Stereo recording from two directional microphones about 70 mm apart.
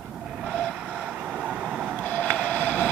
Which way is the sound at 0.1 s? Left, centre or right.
Centre.